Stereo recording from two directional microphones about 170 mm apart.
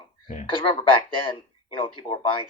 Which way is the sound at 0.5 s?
30° left (ahead or behind).